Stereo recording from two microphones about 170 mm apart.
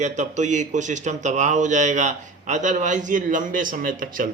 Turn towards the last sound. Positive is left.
turn(degrees=-55)  # may be behind; listen again after turning